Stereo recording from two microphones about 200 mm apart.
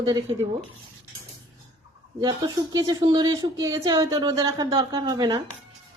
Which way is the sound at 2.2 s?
20° right (ahead or behind).